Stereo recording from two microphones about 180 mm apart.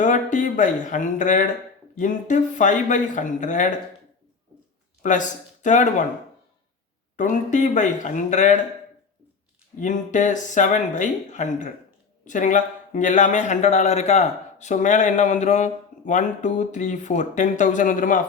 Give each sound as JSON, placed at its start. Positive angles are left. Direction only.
{"t": 0.0, "sound": "a man's voice", "side_deg": 45}
{"t": 5.0, "sound": "speech", "side_deg": 45}
{"t": 7.2, "sound": "a man's voice", "side_deg": 45}
{"t": 9.8, "sound": "a man's voice", "side_deg": 45}